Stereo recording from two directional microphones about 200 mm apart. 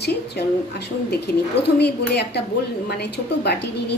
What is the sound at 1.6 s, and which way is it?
A woman's voice, 55° left (ahead or behind).